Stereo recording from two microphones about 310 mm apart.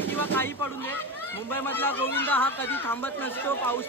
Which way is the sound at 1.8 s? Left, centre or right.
Centre.